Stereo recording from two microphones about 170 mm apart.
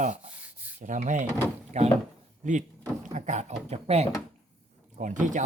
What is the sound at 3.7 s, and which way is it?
Speech, 40° right (ahead or behind).